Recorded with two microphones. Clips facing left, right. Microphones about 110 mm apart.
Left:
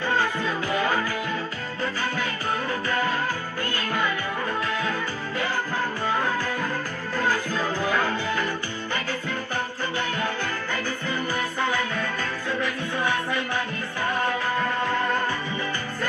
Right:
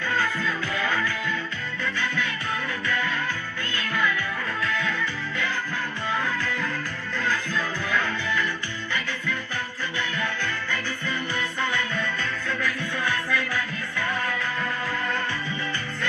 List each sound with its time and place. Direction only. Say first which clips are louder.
0.1 s music: left 1 dB; 30° left (ahead or behind)
11.6 s music: left 1 dB; 35° left (ahead or behind)